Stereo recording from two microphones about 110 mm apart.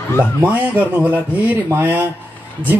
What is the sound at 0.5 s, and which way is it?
Speech, 15° right (ahead or behind).